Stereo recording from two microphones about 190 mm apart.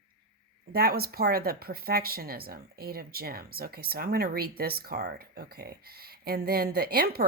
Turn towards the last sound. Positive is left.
turn(degrees=-55)  # may be behind; listen again after turning